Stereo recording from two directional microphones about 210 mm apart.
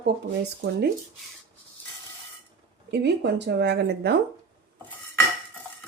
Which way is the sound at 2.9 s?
50° right (ahead or behind).